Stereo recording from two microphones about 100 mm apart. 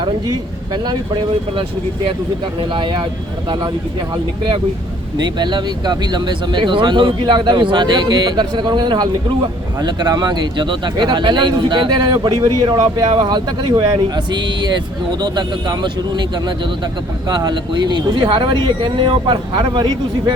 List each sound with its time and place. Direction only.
0.3 s speech: 45° right (ahead or behind)
4.1 s speech: 50° right (ahead or behind)
17.2 s speech: 45° right (ahead or behind)